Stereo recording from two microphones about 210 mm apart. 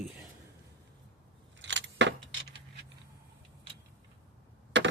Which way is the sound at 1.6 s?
60° right (ahead or behind).